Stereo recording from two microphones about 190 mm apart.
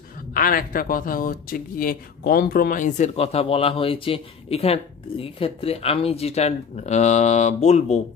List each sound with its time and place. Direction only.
0.3 s speech: 50° left (ahead or behind)